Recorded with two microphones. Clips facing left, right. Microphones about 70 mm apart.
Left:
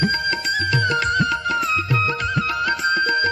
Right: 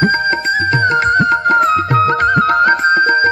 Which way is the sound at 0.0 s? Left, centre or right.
Right.